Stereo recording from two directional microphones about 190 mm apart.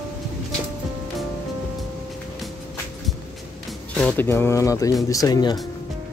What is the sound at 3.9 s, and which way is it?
Speech, 10° left (ahead or behind).